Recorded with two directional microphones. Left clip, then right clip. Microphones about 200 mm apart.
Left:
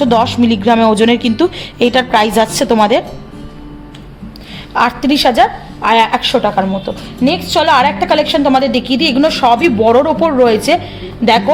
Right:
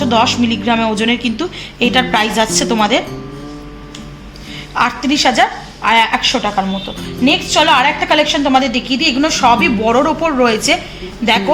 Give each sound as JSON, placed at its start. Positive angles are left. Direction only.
{"t": 0.0, "sound": "a woman's voice", "side_deg": 55}
{"t": 4.7, "sound": "a woman's voice", "side_deg": 50}